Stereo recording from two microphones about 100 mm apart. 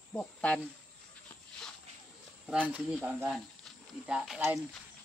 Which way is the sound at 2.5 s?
10° right (ahead or behind).